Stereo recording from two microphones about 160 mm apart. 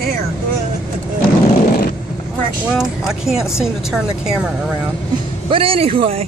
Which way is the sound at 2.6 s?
Centre (ahead or behind).